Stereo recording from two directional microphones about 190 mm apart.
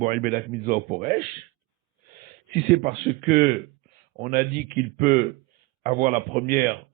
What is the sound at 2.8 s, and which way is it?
Speech, 45° right (ahead or behind).